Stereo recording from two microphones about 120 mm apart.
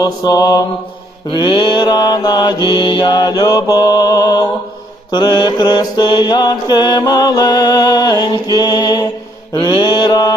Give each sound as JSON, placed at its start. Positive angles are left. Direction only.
{"t": 0.0, "sound": "mantra", "side_deg": 30}
{"t": 1.3, "sound": "mantra", "side_deg": 40}